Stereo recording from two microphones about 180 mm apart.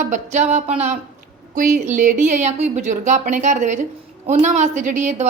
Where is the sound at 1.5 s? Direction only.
45° right (ahead or behind).